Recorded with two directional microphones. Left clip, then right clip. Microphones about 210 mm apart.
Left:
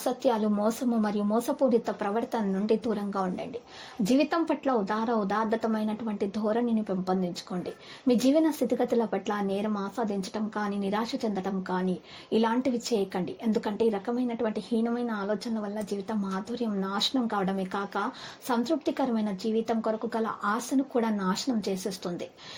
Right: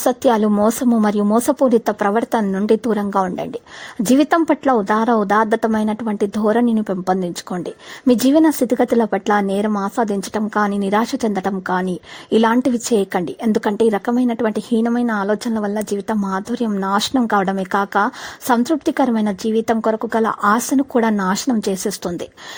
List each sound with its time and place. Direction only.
0.0 s a woman's voice: 45° right (ahead or behind)